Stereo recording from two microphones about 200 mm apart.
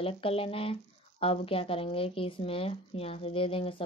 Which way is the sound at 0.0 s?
30° left (ahead or behind).